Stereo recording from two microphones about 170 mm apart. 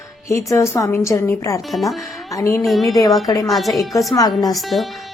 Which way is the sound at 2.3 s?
15° left (ahead or behind).